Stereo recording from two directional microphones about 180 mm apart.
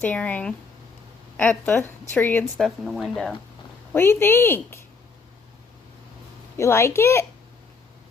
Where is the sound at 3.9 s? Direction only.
15° left (ahead or behind).